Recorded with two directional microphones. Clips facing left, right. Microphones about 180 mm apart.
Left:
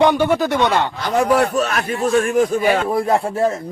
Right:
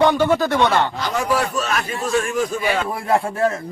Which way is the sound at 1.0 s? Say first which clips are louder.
Left 5 dB; 55° left (ahead or behind).